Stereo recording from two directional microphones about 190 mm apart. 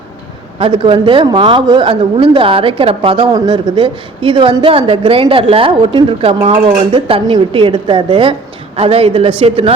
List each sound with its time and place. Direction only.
0.6 s a woman's voice: 30° right (ahead or behind)